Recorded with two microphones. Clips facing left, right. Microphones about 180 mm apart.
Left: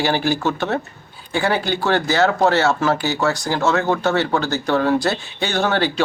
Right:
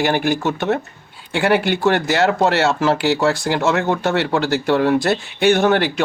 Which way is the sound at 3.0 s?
85° right.